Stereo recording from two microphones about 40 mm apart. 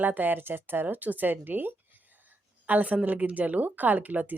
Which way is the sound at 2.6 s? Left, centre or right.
Right.